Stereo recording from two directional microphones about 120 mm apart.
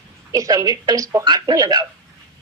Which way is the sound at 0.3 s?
30° right (ahead or behind).